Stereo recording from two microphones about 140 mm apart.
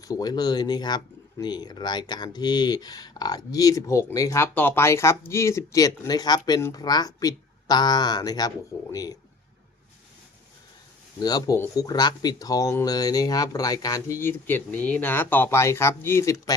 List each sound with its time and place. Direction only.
0.0 s speech: 25° left (ahead or behind)
11.2 s speech: 30° left (ahead or behind)